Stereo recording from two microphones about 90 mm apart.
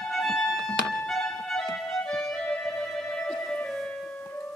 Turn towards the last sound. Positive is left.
turn(degrees=10)  # may be behind; listen again after turning